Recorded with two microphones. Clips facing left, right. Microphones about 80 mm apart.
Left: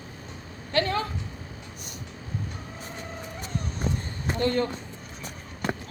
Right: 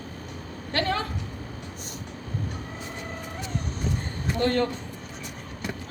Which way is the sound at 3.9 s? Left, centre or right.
Left.